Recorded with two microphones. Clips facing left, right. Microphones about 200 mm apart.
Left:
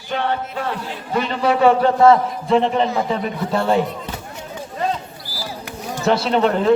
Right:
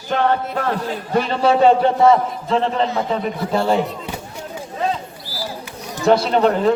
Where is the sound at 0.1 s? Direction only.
45° right (ahead or behind); by 1.9 s 25° right (ahead or behind).